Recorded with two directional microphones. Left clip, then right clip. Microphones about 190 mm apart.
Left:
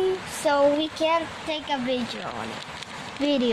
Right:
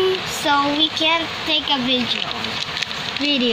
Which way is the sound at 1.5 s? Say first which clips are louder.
Right 9 dB; 35° left (ahead or behind).